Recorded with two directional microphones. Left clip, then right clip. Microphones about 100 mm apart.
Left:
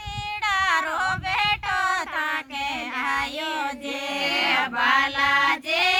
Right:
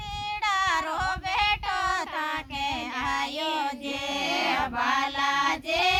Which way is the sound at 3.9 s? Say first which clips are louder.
Left 3 dB; 55° right (ahead or behind).